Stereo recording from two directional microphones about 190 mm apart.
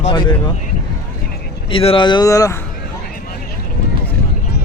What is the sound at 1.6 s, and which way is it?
Speech, 25° left (ahead or behind).